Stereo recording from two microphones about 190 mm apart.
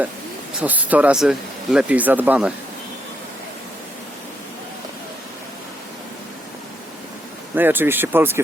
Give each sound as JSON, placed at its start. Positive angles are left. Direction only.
{"t": 0.6, "sound": "speech", "side_deg": -10}
{"t": 7.5, "sound": "speech", "side_deg": -10}